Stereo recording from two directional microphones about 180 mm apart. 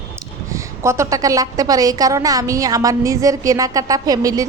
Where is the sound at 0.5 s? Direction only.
15° right (ahead or behind).